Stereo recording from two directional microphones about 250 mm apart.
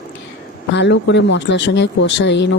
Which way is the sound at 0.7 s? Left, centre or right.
Left.